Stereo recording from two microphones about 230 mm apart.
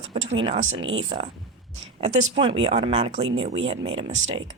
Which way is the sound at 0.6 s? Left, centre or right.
Right.